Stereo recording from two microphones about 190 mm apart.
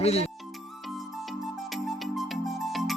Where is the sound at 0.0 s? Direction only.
35° left (ahead or behind).